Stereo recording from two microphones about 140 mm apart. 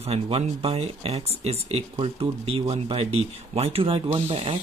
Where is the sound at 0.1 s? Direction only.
45° right (ahead or behind).